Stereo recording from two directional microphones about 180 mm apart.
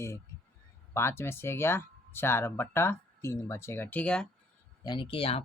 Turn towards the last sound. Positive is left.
turn(degrees=30)  # may be behind; listen again after turning